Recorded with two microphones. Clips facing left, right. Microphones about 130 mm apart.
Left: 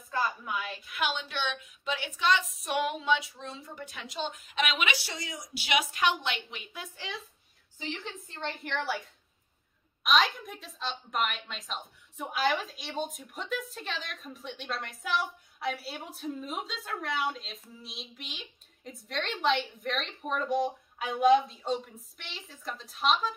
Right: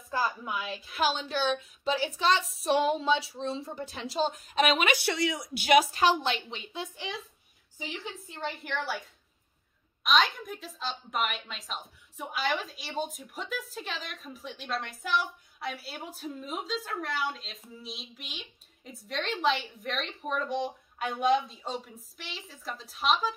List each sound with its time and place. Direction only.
0.1 s a sound: centre (ahead or behind)
0.8 s a woman's voice: 35° right (ahead or behind); by 5.5 s 75° right (ahead or behind)
5.5 s a woman's voice: 45° right (ahead or behind); by 7.2 s 20° right (ahead or behind)
7.8 s speech: 10° right (ahead or behind)